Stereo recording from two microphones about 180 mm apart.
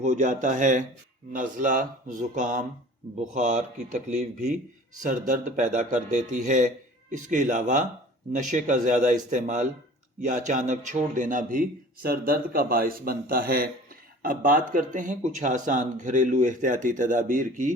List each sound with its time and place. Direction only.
0.0 s a man's voice: 40° right (ahead or behind)